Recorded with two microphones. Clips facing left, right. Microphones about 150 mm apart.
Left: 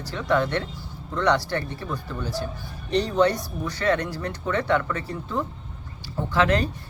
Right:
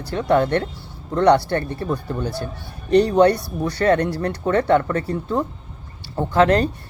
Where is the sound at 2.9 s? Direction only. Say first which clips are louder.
Right 7 dB; 55° right (ahead or behind).